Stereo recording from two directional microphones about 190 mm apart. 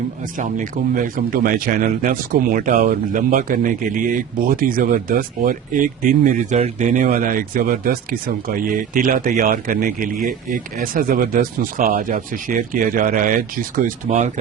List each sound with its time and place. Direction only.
0.3 s speech: 45° right (ahead or behind)